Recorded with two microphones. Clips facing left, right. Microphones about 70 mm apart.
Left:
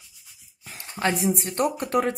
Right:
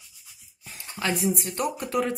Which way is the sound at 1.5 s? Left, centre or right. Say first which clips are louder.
Left 4 dB; left.